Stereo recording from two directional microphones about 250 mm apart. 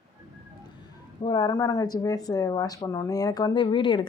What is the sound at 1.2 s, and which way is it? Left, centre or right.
Speech, centre.